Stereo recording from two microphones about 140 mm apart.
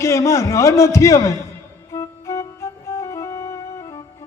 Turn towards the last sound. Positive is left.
turn(degrees=25)  # may be behind; listen again after turning